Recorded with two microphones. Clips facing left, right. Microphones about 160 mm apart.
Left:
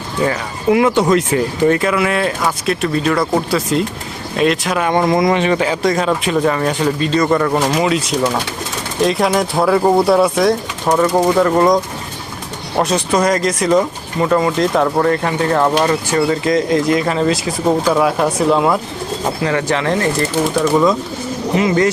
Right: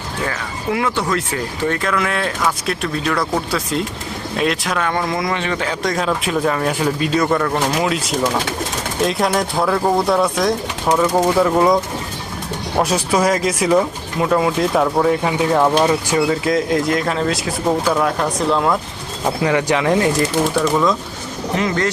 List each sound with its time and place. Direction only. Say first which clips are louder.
0.3 s speech: left 8 dB; 20° left (ahead or behind)
1.8 s speech: left 4 dB; 10° left (ahead or behind)
4.8 s speech: left 9 dB; 20° left (ahead or behind)
11.3 s speech: left 1 dB; 5° right (ahead or behind)
12.8 s speech: left 2 dB; 5° right (ahead or behind)
19.4 s speech: right 2 dB; 15° right (ahead or behind)
20.6 s speech: left 5 dB; 5° left (ahead or behind)